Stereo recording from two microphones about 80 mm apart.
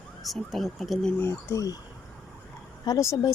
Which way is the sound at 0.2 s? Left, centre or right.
Centre.